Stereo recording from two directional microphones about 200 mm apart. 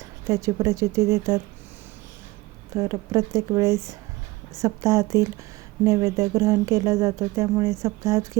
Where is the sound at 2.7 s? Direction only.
15° right (ahead or behind).